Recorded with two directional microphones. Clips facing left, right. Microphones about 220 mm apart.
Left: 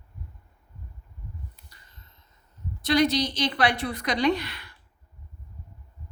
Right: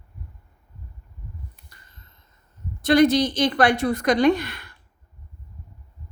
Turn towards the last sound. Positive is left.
turn(degrees=-50)  # may be behind; listen again after turning